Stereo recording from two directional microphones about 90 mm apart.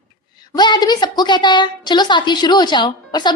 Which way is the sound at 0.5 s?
50° left (ahead or behind).